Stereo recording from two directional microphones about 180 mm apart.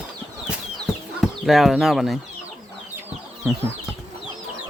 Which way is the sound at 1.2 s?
Centre (ahead or behind).